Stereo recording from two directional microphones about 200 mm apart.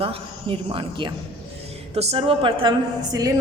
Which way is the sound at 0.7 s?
25° right (ahead or behind).